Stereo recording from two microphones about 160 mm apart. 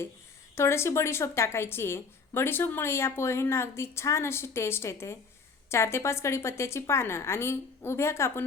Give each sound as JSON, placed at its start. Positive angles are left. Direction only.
{"t": 0.5, "sound": "speech", "side_deg": 15}